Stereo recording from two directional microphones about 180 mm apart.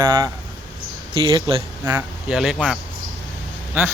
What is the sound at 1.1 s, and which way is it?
Speech, 25° right (ahead or behind).